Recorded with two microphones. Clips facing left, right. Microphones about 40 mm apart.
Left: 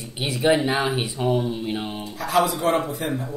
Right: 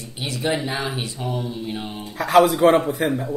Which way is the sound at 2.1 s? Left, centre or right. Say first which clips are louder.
Right 6 dB; right.